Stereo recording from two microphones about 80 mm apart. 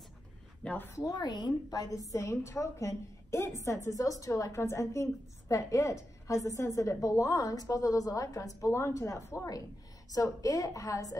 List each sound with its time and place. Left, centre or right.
0.7 s speech: left
1.1 s a woman's voice: left
1.9 s a woman's voice: left